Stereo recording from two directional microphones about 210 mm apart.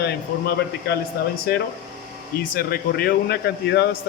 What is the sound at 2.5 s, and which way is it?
Speech, 45° left (ahead or behind).